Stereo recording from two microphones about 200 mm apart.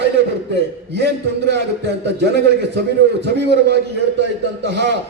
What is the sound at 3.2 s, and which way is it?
A man's voice, 55° right (ahead or behind).